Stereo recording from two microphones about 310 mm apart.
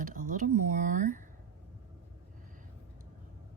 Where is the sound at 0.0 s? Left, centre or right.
Right.